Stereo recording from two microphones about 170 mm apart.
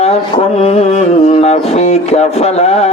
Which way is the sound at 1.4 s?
40° left (ahead or behind).